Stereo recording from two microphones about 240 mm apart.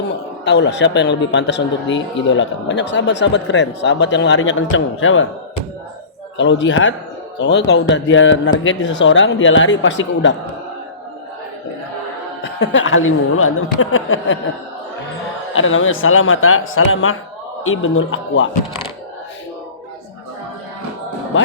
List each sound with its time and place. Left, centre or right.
0.4 s a man's voice: left
6.3 s a man's voice: left
12.4 s speech: left
15.5 s a man's voice: left